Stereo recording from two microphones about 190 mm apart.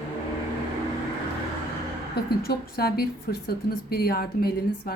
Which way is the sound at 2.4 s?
55° left (ahead or behind).